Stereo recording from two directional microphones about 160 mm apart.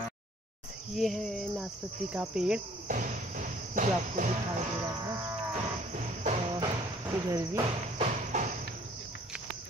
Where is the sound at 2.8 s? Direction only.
55° right (ahead or behind).